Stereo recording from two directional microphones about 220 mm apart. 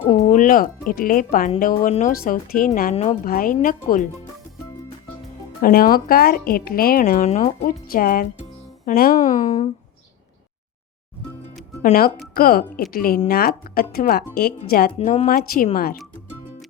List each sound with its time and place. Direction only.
0.2 s speech: 35° left (ahead or behind)
5.6 s speech: 40° left (ahead or behind)
7.3 s speech: 30° left (ahead or behind)
7.6 s speech: 40° left (ahead or behind)
11.8 s speech: 40° left (ahead or behind)
14.9 s speech: 30° left (ahead or behind)